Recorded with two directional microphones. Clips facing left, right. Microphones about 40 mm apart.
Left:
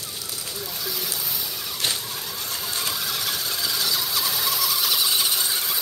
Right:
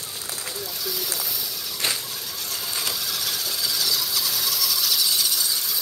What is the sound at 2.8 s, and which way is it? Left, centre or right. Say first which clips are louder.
Vehicle: left 1 dB; centre.